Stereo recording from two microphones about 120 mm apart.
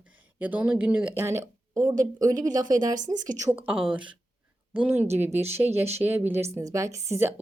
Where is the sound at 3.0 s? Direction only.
90° right.